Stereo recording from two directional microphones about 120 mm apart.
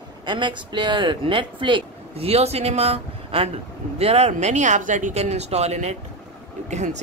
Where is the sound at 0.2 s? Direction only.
40° right (ahead or behind).